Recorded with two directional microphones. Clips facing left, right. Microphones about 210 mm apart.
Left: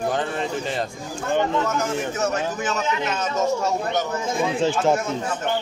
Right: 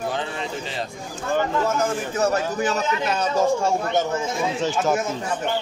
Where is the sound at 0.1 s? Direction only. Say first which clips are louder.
Left 3 dB; 50° left (ahead or behind).